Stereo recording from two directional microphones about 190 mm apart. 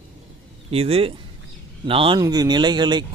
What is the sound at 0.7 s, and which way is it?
Speech, 30° right (ahead or behind).